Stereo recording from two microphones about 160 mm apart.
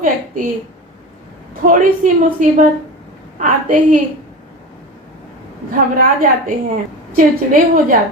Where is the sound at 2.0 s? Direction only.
55° right (ahead or behind).